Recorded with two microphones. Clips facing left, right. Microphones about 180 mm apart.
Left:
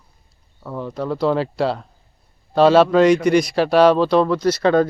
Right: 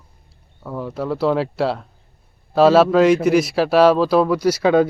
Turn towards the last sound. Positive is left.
turn(degrees=-10)  # may be behind; listen again after turning